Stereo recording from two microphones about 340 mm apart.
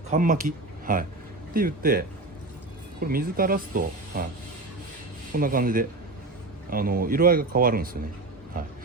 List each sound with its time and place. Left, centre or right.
0.1 s speech: right
5.3 s speech: right